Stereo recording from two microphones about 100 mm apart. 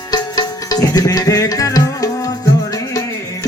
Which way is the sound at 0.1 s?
40° left (ahead or behind).